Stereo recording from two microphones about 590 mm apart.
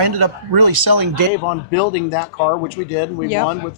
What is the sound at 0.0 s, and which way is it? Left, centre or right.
Speech, right.